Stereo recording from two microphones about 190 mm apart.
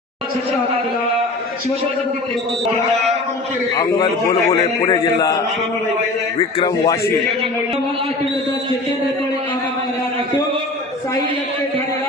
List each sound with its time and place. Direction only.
3.8 s a man's voice: 20° left (ahead or behind)
6.6 s a man's voice: 20° left (ahead or behind)